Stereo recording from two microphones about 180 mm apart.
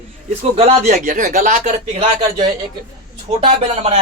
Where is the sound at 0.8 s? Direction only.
50° right (ahead or behind).